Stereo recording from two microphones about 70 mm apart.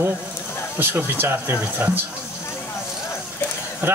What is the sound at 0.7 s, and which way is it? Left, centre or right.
Speech, right.